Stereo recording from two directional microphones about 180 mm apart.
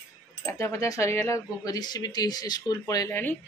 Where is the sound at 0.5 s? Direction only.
15° left (ahead or behind).